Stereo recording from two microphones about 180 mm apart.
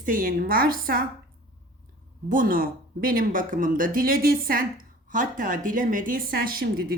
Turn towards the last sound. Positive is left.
turn(degrees=-55)  # may be behind; listen again after turning